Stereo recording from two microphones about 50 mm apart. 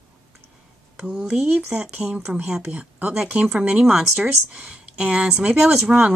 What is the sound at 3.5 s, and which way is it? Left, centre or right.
Speech, right.